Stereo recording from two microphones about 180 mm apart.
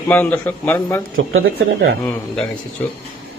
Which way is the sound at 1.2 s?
90° right.